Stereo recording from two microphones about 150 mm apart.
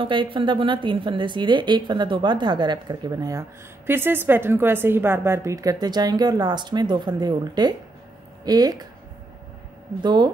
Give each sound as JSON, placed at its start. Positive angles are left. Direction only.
{"t": 0.0, "sound": "a woman's voice", "side_deg": -35}
{"t": 10.0, "sound": "a woman's voice", "side_deg": -30}